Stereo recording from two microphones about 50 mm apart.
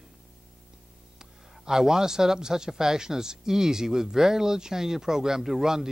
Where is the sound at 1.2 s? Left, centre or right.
Centre.